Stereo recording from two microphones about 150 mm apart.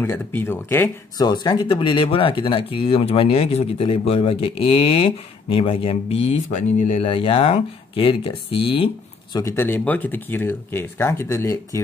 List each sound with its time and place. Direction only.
0.0 s speech: 15° left (ahead or behind)
1.2 s speech: 30° left (ahead or behind)
9.4 s speech: 15° left (ahead or behind)